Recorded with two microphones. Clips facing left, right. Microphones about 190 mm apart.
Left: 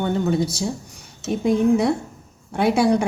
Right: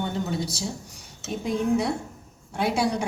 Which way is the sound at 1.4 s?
55° left (ahead or behind).